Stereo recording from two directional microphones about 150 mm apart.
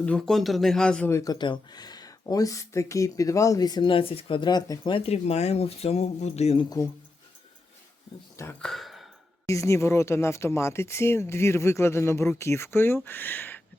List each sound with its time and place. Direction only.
0.0 s speech: 5° left (ahead or behind)
1.1 s speech: 25° left (ahead or behind); by 6.7 s 45° left (ahead or behind)
8.6 s a sound: centre (ahead or behind)
9.5 s speech: 20° left (ahead or behind)